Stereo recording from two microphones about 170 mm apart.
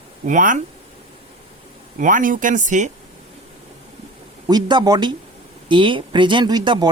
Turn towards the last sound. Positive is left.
turn(degrees=-25)  # may be behind; listen again after turning